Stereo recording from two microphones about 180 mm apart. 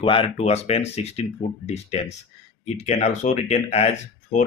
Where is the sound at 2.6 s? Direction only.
40° left (ahead or behind).